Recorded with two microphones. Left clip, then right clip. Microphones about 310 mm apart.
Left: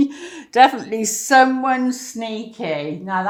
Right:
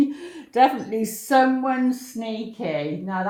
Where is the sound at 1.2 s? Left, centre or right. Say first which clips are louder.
Left 5 dB; left.